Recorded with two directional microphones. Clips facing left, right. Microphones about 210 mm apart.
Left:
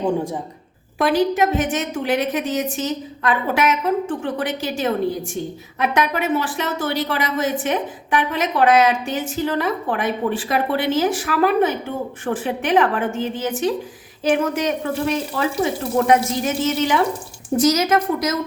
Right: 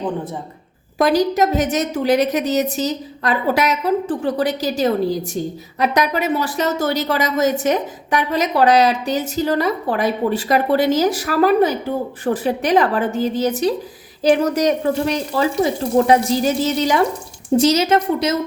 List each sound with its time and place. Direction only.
0.9 s a woman's voice: 40° right (ahead or behind)